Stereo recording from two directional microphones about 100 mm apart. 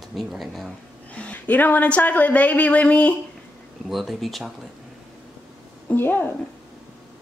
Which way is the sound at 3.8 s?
Centre (ahead or behind).